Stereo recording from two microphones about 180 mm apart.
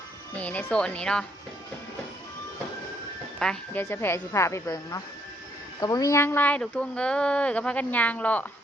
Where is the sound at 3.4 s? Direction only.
5° left (ahead or behind).